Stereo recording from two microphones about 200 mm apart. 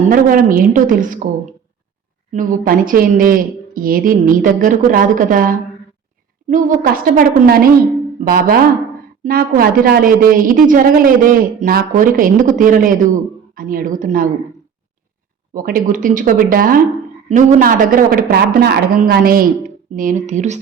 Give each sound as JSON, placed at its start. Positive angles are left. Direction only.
{"t": 0.1, "sound": "a woman's voice", "side_deg": -45}
{"t": 2.3, "sound": "a woman's voice", "side_deg": -40}
{"t": 15.5, "sound": "a woman's voice", "side_deg": -45}